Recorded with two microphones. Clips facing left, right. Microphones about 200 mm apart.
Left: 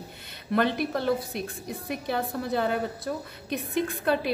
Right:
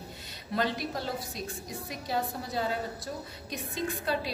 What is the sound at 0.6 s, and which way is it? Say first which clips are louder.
A woman's voice: left 6 dB; 60° left (ahead or behind).